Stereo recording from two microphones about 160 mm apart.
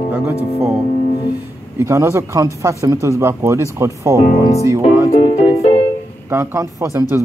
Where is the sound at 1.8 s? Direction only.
15° right (ahead or behind).